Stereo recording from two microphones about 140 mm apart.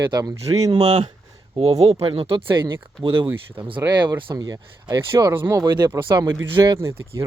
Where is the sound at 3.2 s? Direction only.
15° right (ahead or behind).